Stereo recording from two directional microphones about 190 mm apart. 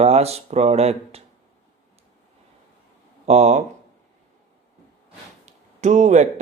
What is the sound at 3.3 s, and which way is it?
Speech, 35° right (ahead or behind).